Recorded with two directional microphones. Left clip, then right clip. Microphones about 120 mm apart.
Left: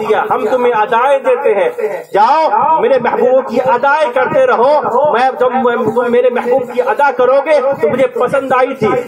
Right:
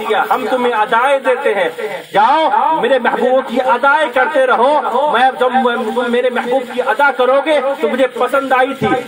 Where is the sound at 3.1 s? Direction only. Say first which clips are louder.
Left 3 dB; 30° left (ahead or behind).